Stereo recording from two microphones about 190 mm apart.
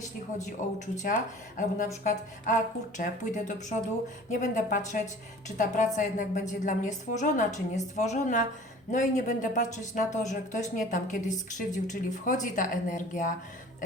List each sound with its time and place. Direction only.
0.6 s a woman's voice: 40° left (ahead or behind)